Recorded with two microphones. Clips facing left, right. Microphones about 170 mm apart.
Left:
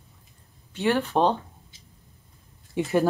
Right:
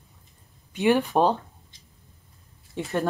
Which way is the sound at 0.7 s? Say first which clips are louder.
Right 2 dB; 15° right (ahead or behind).